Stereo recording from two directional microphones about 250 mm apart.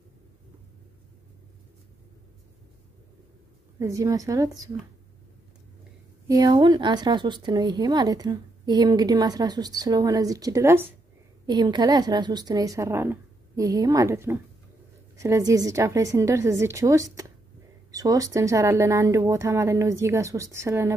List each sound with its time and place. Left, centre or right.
3.8 s speech: centre
6.2 s speech: centre